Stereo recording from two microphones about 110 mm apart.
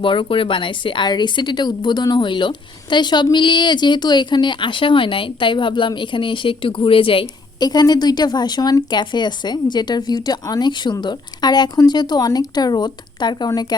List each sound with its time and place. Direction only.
0.0 s speech: 50° left (ahead or behind)
7.6 s a woman's voice: 40° left (ahead or behind)